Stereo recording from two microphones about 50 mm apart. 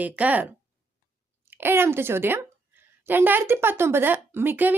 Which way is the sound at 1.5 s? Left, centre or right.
Right.